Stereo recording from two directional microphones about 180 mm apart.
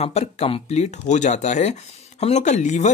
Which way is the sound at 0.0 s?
35° left (ahead or behind).